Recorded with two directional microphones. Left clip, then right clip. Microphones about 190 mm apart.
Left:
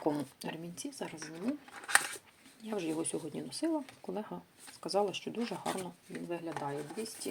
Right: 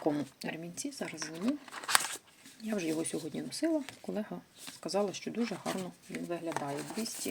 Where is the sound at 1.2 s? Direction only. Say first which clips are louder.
Right 6 dB; 55° right (ahead or behind).